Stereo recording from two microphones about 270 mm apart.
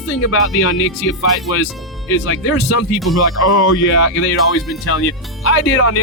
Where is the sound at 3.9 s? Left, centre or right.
Left.